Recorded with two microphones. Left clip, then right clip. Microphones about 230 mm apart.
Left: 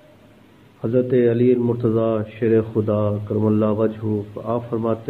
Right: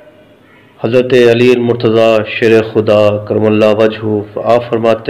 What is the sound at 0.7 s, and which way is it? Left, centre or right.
Speech, centre.